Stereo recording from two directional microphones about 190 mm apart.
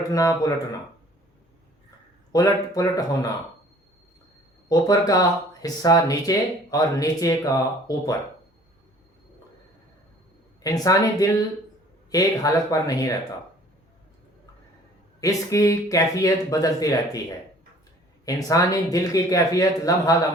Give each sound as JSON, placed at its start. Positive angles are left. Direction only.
{"t": 0.1, "sound": "speech", "side_deg": 20}
{"t": 2.3, "sound": "speech", "side_deg": 20}
{"t": 4.7, "sound": "speech", "side_deg": 20}
{"t": 10.6, "sound": "speech", "side_deg": 20}
{"t": 15.2, "sound": "speech", "side_deg": 15}
{"t": 18.3, "sound": "speech", "side_deg": 20}